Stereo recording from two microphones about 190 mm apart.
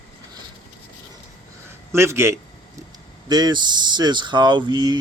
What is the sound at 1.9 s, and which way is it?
A man's voice, 15° right (ahead or behind).